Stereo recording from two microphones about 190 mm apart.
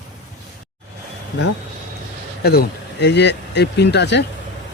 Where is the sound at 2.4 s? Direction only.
55° left (ahead or behind).